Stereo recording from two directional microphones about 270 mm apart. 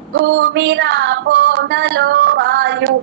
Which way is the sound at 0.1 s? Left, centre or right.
Right.